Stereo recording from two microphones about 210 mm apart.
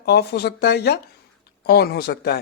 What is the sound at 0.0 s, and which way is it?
Speech, 50° left (ahead or behind).